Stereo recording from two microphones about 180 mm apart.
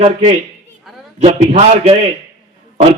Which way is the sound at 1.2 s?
30° right (ahead or behind).